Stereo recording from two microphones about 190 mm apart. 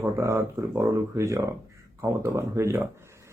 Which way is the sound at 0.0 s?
15° right (ahead or behind).